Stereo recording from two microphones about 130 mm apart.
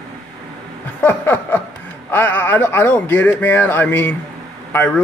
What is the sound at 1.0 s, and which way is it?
Speech, 15° left (ahead or behind).